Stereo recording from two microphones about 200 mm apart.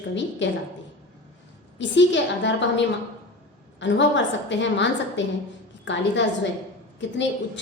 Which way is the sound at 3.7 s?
65° left (ahead or behind).